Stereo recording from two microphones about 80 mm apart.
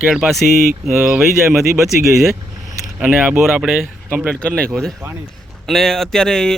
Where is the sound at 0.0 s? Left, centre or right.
Centre.